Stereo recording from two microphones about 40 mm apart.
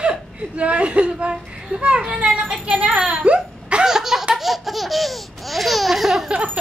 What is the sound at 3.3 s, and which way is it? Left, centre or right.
Laughter, centre.